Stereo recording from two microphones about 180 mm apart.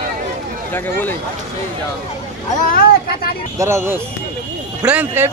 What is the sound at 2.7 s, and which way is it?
Speech, 55° left (ahead or behind).